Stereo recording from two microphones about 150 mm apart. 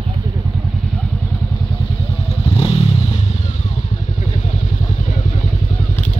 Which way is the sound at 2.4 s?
40° left (ahead or behind).